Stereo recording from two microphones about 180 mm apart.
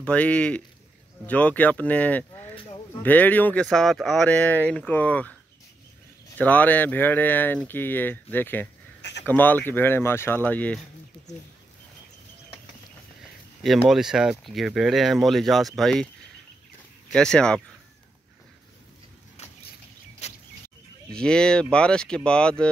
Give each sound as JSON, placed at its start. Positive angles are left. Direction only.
{"t": 0.0, "sound": "speech", "side_deg": 5}
{"t": 6.3, "sound": "speech", "side_deg": 10}
{"t": 13.6, "sound": "speech", "side_deg": 0}
{"t": 17.1, "sound": "speech", "side_deg": 5}
{"t": 20.2, "sound": "a sound", "side_deg": 40}
{"t": 21.1, "sound": "speech", "side_deg": 5}